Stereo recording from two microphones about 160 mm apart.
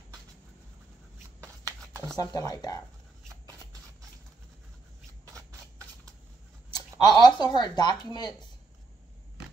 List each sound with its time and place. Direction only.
2.1 s speech: 25° left (ahead or behind)
5.2 s a sound: 20° right (ahead or behind)
6.7 s speech: 25° left (ahead or behind)